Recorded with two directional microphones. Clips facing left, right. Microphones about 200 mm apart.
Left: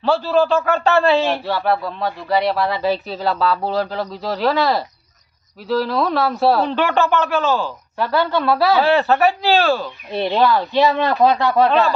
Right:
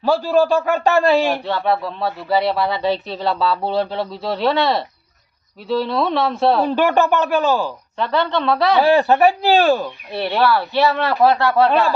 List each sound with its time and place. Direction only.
0.0 s a man's voice: 15° right (ahead or behind)
1.5 s speech: centre (ahead or behind)
6.7 s a man's voice: 15° right (ahead or behind)
7.9 s speech: 5° left (ahead or behind)
8.8 s a man's voice: 15° right (ahead or behind)
10.1 s speech: 20° left (ahead or behind)
11.7 s a man's voice: 10° right (ahead or behind)